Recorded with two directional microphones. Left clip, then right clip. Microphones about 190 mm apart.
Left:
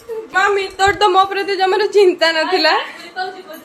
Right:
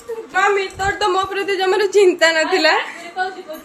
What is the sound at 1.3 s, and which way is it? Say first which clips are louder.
Speech: left 2 dB; 5° left (ahead or behind).